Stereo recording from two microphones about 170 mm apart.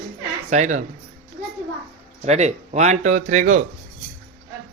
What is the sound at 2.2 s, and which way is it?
Speech, 40° right (ahead or behind).